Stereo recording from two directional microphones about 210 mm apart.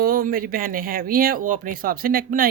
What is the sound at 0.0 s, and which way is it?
Speech, 45° right (ahead or behind).